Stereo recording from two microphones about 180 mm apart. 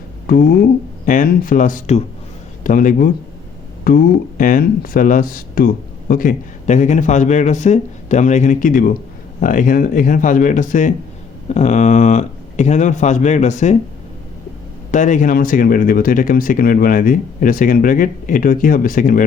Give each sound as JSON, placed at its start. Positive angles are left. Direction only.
{"t": 0.3, "sound": "speech", "side_deg": 60}
{"t": 14.8, "sound": "speech", "side_deg": 45}